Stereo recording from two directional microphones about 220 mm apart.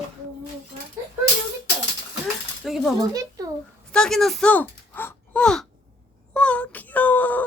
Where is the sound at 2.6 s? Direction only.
Centre (ahead or behind).